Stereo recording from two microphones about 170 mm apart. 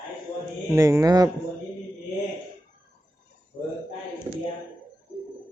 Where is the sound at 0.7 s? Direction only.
15° right (ahead or behind).